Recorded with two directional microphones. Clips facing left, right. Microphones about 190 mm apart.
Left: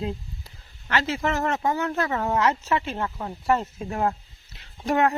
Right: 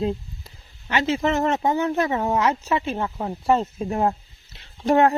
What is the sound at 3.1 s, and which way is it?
Speech, 25° right (ahead or behind).